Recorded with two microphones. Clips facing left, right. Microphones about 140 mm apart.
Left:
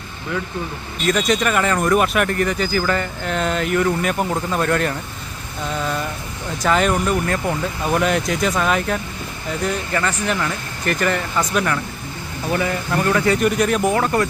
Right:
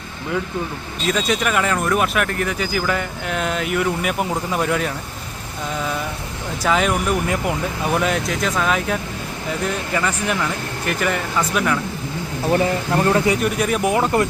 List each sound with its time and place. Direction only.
1.0 s speech: 5° right (ahead or behind)
6.6 s speech: centre (ahead or behind)
12.5 s speech: 25° right (ahead or behind)
13.4 s speech: 5° right (ahead or behind)
14.0 s speech: 20° right (ahead or behind)